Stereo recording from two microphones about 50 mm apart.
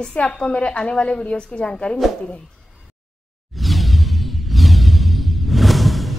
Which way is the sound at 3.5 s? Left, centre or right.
Centre.